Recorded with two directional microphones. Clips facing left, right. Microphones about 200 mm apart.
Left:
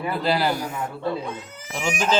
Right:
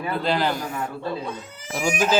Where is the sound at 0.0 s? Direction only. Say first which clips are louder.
Left 1 dB; 5° left (ahead or behind).